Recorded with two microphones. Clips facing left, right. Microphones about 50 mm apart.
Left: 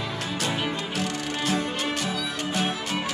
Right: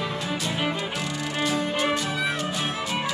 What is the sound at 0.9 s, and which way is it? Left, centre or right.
Music, left.